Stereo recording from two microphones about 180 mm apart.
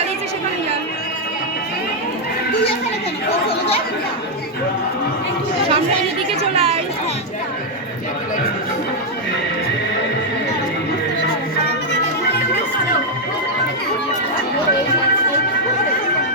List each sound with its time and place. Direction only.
6.4 s chatter: 35° right (ahead or behind)